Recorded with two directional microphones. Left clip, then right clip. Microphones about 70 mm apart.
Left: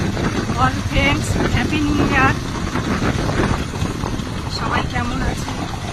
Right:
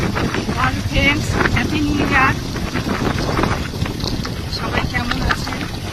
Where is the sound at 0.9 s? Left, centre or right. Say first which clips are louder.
Right 1 dB; left.